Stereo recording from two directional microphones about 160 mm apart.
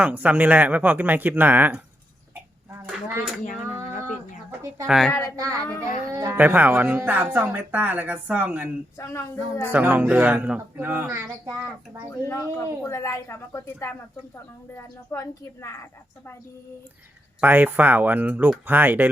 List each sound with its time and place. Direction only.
0.0 s speech: 10° right (ahead or behind)
2.3 s a sound: 10° right (ahead or behind)
4.9 s a woman's voice: centre (ahead or behind)
5.4 s speech: 20° right (ahead or behind)
9.0 s a woman's voice: 15° left (ahead or behind)
9.7 s speech: 10° right (ahead or behind)
12.2 s a woman's voice: 20° left (ahead or behind)
15.1 s a woman's voice: 20° left (ahead or behind)
17.4 s speech: 10° right (ahead or behind)